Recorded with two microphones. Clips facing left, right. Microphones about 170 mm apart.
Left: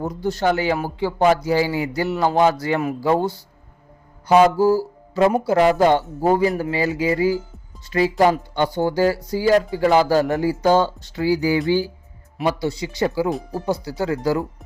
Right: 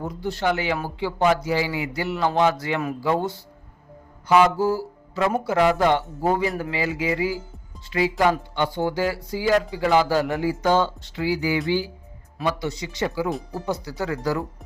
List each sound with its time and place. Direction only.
0.0 s speech: 40° left (ahead or behind)
4.3 s music: 35° left (ahead or behind)
5.5 s speech: 35° left (ahead or behind)